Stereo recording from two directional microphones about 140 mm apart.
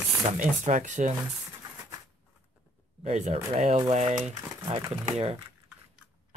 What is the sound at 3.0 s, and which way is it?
Speech, 50° right (ahead or behind).